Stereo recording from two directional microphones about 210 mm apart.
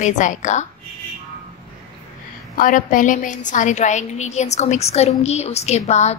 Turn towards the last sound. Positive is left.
turn(degrees=30)  # may be behind; listen again after turning